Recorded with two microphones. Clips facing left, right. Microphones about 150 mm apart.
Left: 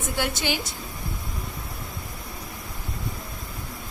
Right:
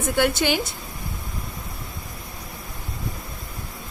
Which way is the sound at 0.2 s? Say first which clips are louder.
Right 7 dB; 55° right (ahead or behind).